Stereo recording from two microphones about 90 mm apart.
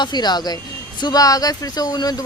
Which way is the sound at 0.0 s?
50° left (ahead or behind).